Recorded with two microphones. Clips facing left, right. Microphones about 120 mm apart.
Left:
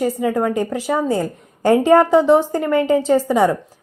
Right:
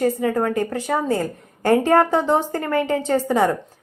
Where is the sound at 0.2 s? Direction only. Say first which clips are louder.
Left 2 dB; 15° left (ahead or behind).